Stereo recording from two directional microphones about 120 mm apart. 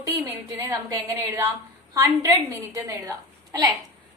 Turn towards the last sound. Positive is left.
turn(degrees=-25)  # may be behind; listen again after turning